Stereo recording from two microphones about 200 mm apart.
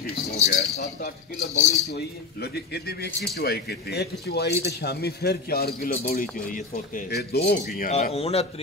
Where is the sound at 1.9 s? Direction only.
50° left (ahead or behind).